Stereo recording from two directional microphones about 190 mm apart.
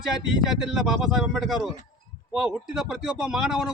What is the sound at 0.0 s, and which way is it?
A man's voice, 5° right (ahead or behind).